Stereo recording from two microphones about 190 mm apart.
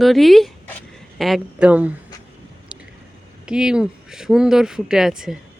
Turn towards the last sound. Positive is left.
turn(degrees=-5)  # may be behind; listen again after turning